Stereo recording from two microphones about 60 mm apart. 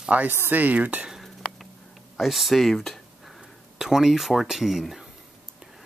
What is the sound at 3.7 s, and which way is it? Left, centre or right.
Speech, centre.